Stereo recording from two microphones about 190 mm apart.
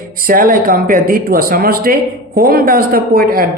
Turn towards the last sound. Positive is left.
turn(degrees=-50)  # may be behind; listen again after turning